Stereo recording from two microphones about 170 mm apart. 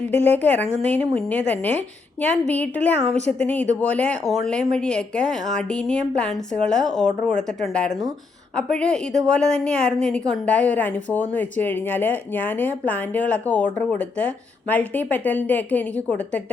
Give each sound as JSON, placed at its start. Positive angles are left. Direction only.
{"t": 0.0, "sound": "a woman's voice", "side_deg": 10}